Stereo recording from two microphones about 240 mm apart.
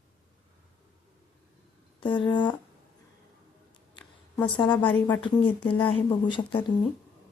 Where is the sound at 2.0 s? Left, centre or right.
Centre.